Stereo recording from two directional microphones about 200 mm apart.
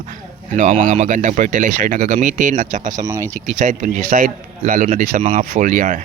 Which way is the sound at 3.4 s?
35° right (ahead or behind).